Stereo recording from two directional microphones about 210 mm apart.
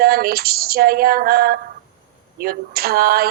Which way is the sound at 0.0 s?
45° right (ahead or behind).